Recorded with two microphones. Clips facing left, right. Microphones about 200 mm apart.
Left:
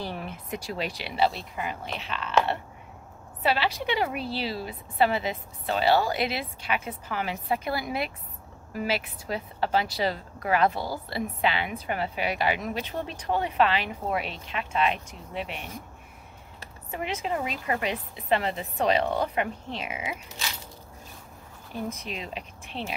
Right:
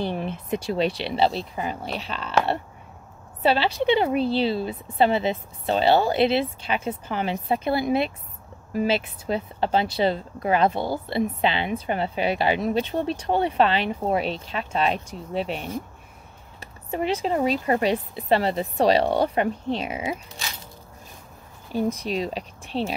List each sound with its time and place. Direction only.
0.0 s speech: 25° right (ahead or behind)
16.9 s a woman's voice: 30° right (ahead or behind)
21.7 s a woman's voice: 35° right (ahead or behind)